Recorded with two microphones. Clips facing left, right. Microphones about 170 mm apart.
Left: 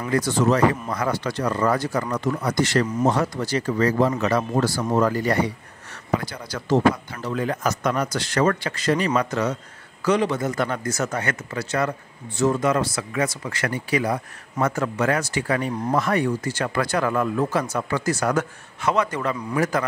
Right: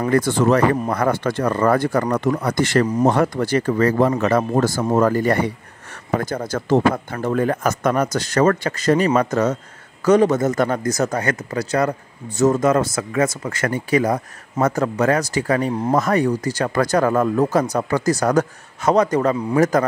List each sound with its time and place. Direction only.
0.0 s speech: 55° right (ahead or behind)